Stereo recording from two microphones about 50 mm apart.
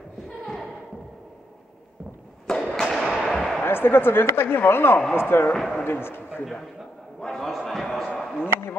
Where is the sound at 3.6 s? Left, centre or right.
Left.